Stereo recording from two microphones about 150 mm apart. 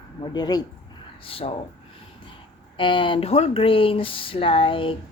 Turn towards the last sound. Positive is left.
turn(degrees=35)  # may be behind; listen again after turning